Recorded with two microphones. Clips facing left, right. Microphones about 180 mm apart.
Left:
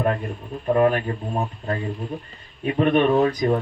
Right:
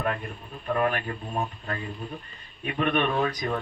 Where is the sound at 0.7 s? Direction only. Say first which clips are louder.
Left 7 dB; 30° left (ahead or behind).